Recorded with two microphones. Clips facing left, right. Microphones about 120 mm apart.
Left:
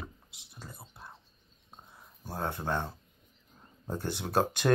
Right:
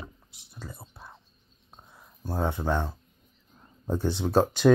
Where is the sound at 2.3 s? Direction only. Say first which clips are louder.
Right 5 dB; 5° right (ahead or behind).